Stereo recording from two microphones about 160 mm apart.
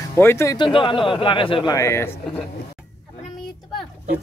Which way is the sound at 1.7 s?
15° left (ahead or behind).